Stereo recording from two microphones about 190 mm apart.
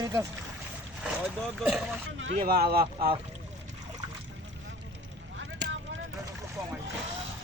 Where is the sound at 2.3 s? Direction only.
55° right (ahead or behind).